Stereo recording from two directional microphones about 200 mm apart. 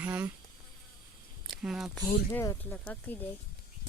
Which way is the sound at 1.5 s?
Centre (ahead or behind).